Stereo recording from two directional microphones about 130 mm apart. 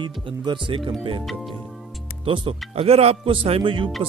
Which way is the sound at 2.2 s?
40° right (ahead or behind).